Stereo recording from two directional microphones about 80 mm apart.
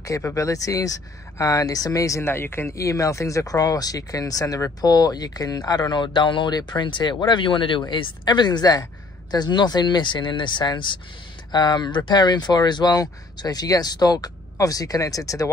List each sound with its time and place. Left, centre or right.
0.0 s speech: left
4.8 s speech: left
5.7 s speech: left
11.5 s speech: left